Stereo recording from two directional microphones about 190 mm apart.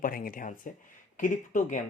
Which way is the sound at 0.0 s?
45° left (ahead or behind).